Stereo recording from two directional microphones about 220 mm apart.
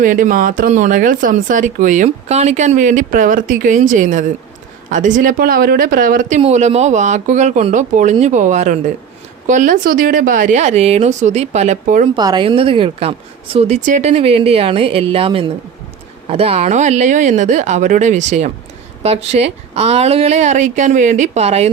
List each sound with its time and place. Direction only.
0.0 s speech: 40° right (ahead or behind)
12.1 s speech: 20° right (ahead or behind)